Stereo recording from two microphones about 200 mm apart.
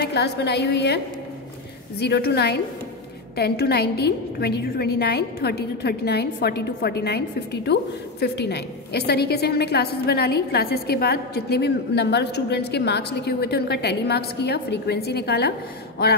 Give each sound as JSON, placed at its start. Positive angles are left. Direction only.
{"t": 0.0, "sound": "a woman's voice", "side_deg": 55}